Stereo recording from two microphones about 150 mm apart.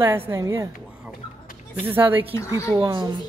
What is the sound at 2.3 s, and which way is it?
Speech, 20° left (ahead or behind).